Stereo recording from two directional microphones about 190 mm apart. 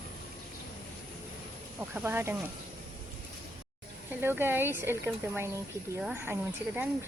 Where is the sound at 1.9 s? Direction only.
10° right (ahead or behind).